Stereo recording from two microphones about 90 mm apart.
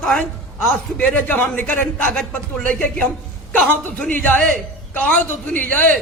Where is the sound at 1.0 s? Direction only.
20° left (ahead or behind).